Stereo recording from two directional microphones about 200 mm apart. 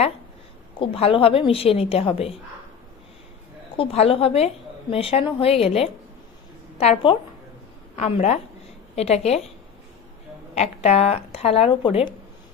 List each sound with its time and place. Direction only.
0.8 s a woman's voice: 25° left (ahead or behind)
3.8 s a woman's voice: 30° left (ahead or behind)
10.5 s speech: 35° left (ahead or behind)